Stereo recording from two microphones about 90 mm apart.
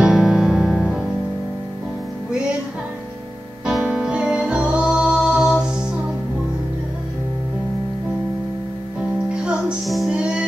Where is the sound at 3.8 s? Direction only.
10° right (ahead or behind).